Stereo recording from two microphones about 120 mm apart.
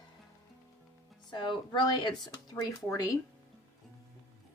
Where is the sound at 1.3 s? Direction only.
40° left (ahead or behind).